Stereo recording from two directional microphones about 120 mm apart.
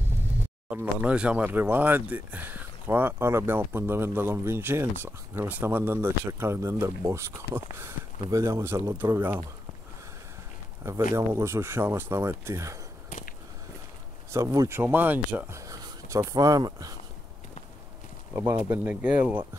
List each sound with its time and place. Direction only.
0.7 s speech: 10° right (ahead or behind)
10.8 s speech: 20° right (ahead or behind)
14.3 s speech: 25° right (ahead or behind)
15.6 s speech: 25° right (ahead or behind)
18.7 s speech: 15° right (ahead or behind)